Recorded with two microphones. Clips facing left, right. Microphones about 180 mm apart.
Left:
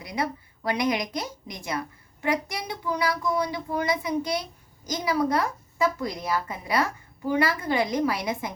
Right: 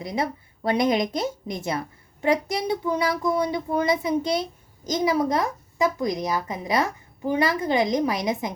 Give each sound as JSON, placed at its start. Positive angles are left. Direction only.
{"t": 0.0, "sound": "a woman's voice", "side_deg": -25}